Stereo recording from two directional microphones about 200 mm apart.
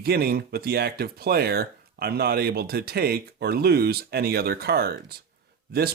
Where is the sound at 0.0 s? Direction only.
50° right (ahead or behind).